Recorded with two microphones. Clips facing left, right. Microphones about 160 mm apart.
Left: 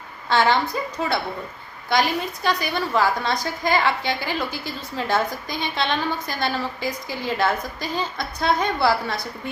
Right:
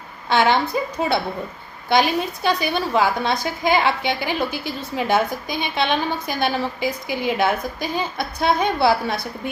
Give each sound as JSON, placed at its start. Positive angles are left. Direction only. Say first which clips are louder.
{"t": 0.3, "sound": "a woman's voice", "louder": "right 2 dB", "side_deg": -20}